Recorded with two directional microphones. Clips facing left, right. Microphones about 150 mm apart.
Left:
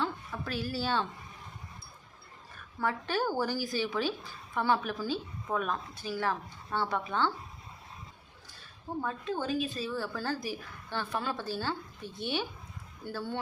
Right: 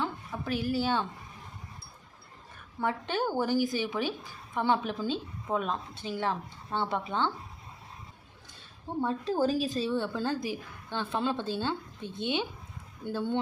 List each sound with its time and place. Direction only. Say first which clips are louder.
0.0 s a woman's voice: right 1 dB; 15° right (ahead or behind)
2.7 s a woman's voice: right 1 dB; 20° right (ahead or behind)
9.0 s a woman's voice: right 6 dB; 30° right (ahead or behind)